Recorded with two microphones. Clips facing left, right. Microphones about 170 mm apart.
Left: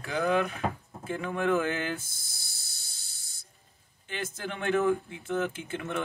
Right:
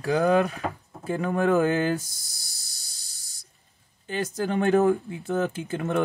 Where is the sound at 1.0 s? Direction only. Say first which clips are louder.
Right 5 dB; 40° right (ahead or behind).